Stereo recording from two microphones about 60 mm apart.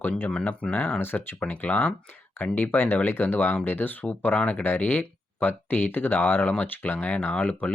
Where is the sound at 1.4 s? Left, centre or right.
Left.